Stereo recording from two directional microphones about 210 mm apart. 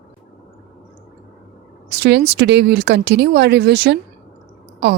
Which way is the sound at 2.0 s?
55° right (ahead or behind).